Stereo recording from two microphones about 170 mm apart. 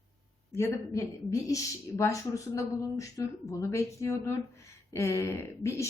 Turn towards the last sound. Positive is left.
turn(degrees=15)  # may be behind; listen again after turning